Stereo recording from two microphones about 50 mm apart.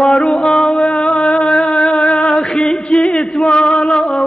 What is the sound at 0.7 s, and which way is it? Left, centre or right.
Music, centre.